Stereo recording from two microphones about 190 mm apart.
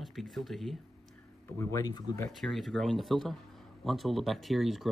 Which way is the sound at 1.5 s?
15° left (ahead or behind).